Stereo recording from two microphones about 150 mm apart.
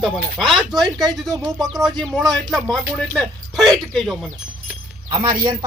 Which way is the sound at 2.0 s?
Centre (ahead or behind).